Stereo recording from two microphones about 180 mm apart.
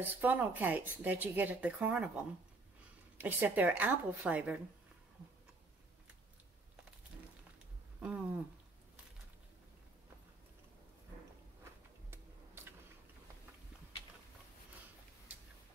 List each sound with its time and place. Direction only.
0.0 s speech: 10° right (ahead or behind)
3.2 s speech: 10° right (ahead or behind)
8.0 s speech: 10° right (ahead or behind)
12.1 s typing: 15° right (ahead or behind)